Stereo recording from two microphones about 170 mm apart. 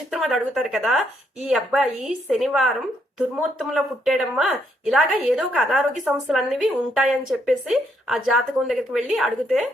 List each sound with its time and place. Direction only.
0.1 s speech: centre (ahead or behind)